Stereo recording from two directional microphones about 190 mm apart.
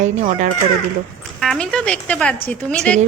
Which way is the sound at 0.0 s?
40° right (ahead or behind).